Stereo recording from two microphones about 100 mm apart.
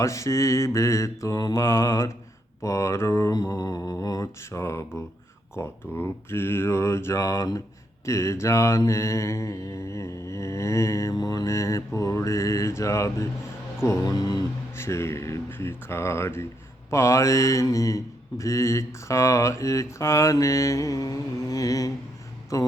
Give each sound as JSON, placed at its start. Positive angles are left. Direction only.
{"t": 0.0, "sound": "mantra", "side_deg": 30}
{"t": 14.8, "sound": "mantra", "side_deg": 25}